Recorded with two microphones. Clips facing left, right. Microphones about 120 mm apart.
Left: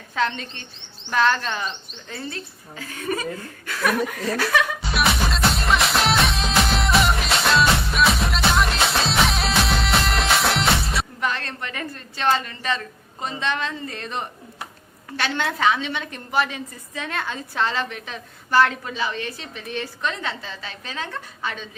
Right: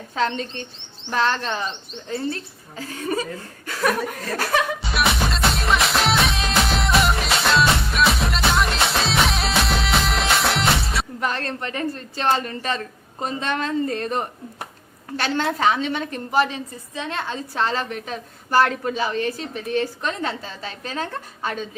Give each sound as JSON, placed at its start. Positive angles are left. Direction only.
{"t": 0.2, "sound": "a woman's voice", "side_deg": -30}
{"t": 4.8, "sound": "music", "side_deg": 0}
{"t": 11.2, "sound": "a woman's voice", "side_deg": -40}
{"t": 16.9, "sound": "a woman's voice", "side_deg": -25}